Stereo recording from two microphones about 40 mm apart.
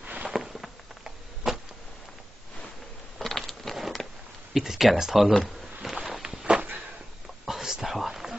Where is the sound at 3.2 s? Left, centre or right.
Centre.